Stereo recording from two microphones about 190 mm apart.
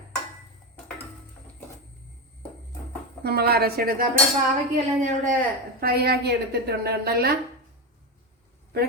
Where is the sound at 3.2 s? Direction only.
55° right (ahead or behind).